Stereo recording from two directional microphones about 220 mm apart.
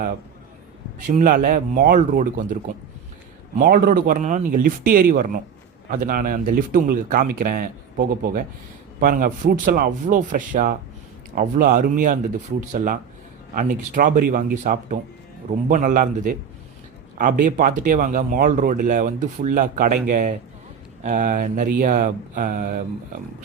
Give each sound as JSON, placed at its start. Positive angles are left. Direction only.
{"t": 0.9, "sound": "speech", "side_deg": -35}
{"t": 3.6, "sound": "speech", "side_deg": -40}